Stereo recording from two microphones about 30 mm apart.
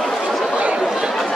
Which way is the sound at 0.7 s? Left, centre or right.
Right.